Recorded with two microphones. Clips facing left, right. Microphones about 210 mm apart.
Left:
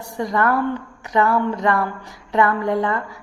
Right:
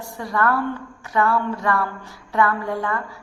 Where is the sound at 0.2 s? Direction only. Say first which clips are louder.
Left 3 dB; 20° left (ahead or behind).